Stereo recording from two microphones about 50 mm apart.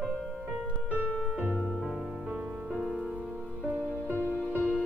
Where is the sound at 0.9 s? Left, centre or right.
Left.